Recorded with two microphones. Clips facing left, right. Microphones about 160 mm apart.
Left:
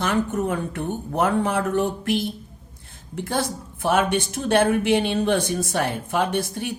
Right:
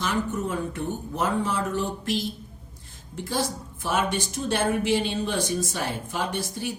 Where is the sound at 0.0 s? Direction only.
60° left (ahead or behind).